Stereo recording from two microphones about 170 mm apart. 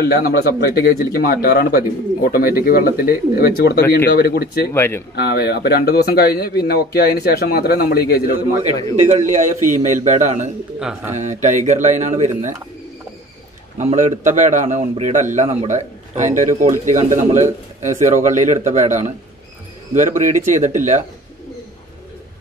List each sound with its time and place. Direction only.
0.0 s speech: 65° left (ahead or behind)
4.7 s speech: 15° left (ahead or behind)
5.1 s a man's voice: 75° left (ahead or behind)
9.1 s a man's voice: 45° right (ahead or behind)
10.8 s speech: 10° right (ahead or behind)
11.1 s a man's voice: 45° right (ahead or behind)
13.7 s a man's voice: 45° right (ahead or behind)